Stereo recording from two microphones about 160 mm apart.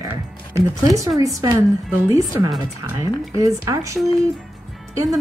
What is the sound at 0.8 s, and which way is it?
Music, 20° right (ahead or behind).